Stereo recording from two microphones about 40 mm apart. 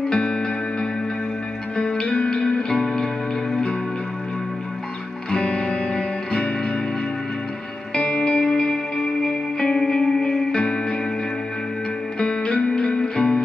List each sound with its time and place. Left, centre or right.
0.1 s music: centre
2.7 s music: centre
5.4 s music: left
7.9 s music: left
12.2 s music: left